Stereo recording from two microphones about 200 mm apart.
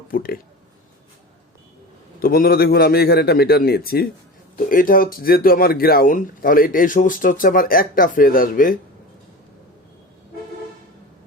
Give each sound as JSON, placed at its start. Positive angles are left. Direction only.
{"t": 0.1, "sound": "speech", "side_deg": 45}
{"t": 2.2, "sound": "speech", "side_deg": 50}